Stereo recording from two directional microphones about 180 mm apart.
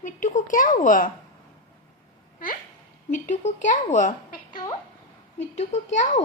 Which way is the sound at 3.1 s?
40° left (ahead or behind).